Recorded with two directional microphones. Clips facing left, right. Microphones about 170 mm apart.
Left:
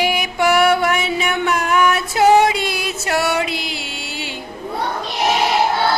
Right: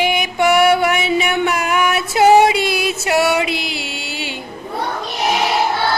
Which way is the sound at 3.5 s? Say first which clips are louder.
Right 2 dB; 65° right (ahead or behind).